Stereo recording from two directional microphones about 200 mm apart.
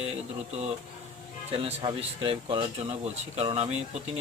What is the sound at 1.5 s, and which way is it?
A man's voice, 30° right (ahead or behind).